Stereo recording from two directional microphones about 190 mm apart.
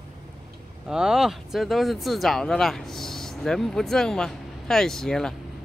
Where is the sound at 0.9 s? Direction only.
5° right (ahead or behind).